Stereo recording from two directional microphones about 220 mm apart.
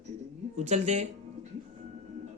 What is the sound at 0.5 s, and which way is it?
Speech, 30° right (ahead or behind).